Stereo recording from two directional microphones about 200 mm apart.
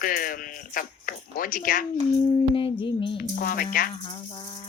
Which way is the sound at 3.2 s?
45° left (ahead or behind).